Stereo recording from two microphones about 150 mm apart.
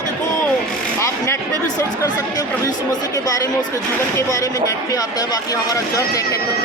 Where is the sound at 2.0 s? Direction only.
25° left (ahead or behind).